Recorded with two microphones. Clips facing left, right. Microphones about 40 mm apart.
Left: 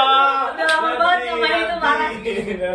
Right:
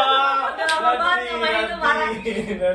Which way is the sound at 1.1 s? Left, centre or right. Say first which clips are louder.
Left 3 dB; left.